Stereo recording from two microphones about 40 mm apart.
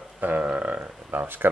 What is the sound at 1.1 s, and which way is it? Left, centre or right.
Speech, right.